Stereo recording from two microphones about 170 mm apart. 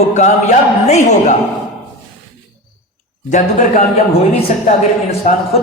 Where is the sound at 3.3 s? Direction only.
45° left (ahead or behind).